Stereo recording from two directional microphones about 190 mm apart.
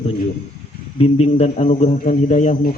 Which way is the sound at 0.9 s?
35° left (ahead or behind).